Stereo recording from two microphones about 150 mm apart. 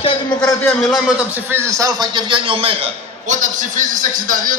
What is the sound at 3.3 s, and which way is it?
A man's voice, 55° right (ahead or behind).